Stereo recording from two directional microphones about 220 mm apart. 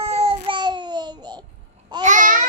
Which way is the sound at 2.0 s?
35° right (ahead or behind).